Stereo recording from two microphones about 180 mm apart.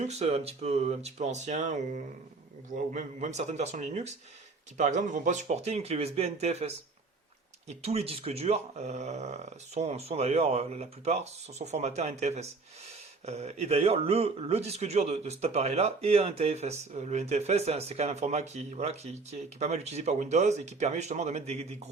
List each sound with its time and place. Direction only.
0.0 s speech: 35° right (ahead or behind)
2.9 s speech: 40° right (ahead or behind)